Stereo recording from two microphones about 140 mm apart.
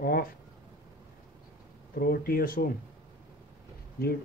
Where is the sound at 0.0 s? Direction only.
90° left.